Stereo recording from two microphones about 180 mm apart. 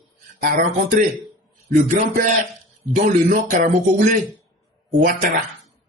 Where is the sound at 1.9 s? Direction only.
45° right (ahead or behind).